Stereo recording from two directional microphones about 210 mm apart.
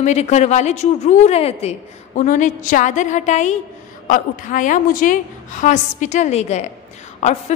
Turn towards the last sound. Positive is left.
turn(degrees=30)  # may be behind; listen again after turning